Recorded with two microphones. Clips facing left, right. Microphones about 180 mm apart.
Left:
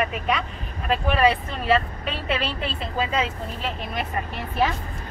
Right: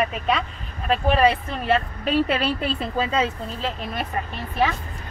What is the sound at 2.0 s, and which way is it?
Speech, 40° right (ahead or behind).